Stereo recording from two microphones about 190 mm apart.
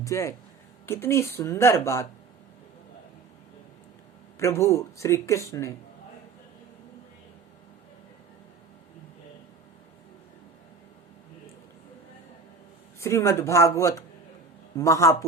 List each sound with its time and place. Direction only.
0.0 s speech: 15° left (ahead or behind)
4.4 s speech: 15° left (ahead or behind)
13.0 s speech: 15° left (ahead or behind)